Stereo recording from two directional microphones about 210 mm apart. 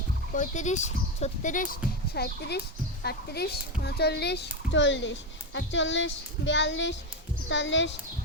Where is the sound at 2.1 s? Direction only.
50° left (ahead or behind).